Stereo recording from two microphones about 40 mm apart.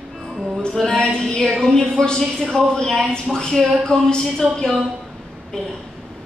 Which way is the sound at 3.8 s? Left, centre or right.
Centre.